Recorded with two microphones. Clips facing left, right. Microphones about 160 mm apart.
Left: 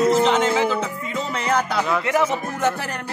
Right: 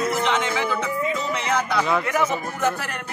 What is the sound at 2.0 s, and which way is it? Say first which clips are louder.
Speech: left 3 dB; 30° left (ahead or behind).